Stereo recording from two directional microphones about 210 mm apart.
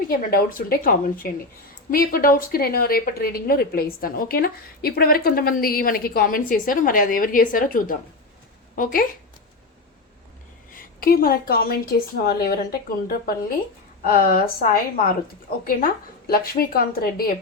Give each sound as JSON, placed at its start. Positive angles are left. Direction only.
{"t": 0.1, "sound": "a woman's voice", "side_deg": 45}
{"t": 10.7, "sound": "a woman's voice", "side_deg": 45}
{"t": 14.0, "sound": "a woman's voice", "side_deg": 40}